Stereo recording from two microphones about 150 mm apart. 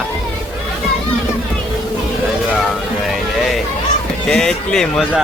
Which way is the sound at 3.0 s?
Centre (ahead or behind).